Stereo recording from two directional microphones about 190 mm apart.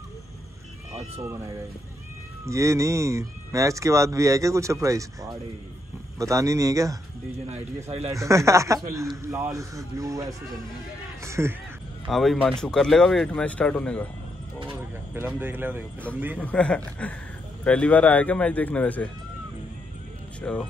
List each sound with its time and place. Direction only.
1.2 s speech: 15° right (ahead or behind)
7.4 s speech: 35° right (ahead or behind)
8.2 s speech: 15° right (ahead or behind)
11.2 s a sound: 15° right (ahead or behind)
12.1 s speech: centre (ahead or behind)
14.7 s speech: 10° right (ahead or behind)
16.3 s a man's voice: 5° left (ahead or behind)
20.4 s a man's voice: 5° left (ahead or behind)